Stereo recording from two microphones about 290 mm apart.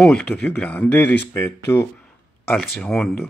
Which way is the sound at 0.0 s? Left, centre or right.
Centre.